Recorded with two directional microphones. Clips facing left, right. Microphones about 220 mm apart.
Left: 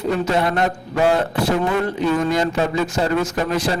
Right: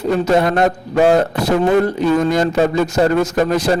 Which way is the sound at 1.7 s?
40° right (ahead or behind).